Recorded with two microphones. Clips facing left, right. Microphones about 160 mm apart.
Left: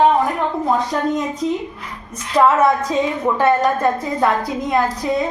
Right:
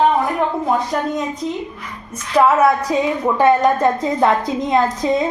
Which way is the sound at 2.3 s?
10° right (ahead or behind).